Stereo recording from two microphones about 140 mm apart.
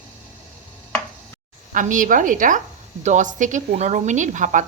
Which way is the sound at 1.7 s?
65° right (ahead or behind).